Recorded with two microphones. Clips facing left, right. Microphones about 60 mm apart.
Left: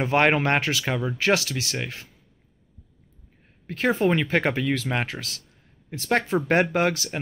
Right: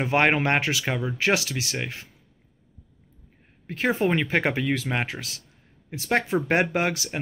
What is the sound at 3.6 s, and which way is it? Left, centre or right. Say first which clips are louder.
Speech: left 2 dB; centre.